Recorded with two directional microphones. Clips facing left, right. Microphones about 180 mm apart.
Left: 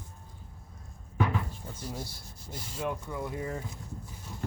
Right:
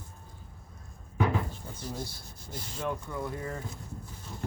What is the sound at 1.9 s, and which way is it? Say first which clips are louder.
Speech: right 2 dB; 5° left (ahead or behind).